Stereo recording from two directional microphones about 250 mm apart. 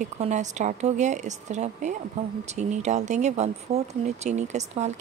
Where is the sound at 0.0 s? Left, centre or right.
Right.